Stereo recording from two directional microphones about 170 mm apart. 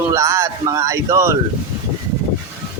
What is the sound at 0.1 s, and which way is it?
Speech, 15° right (ahead or behind).